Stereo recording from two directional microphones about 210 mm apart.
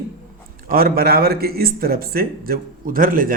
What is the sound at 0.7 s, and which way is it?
Speech, 45° right (ahead or behind).